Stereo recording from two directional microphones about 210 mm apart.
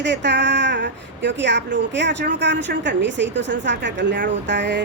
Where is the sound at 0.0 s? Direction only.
55° right (ahead or behind).